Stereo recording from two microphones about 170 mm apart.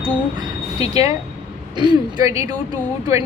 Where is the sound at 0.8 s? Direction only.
20° right (ahead or behind).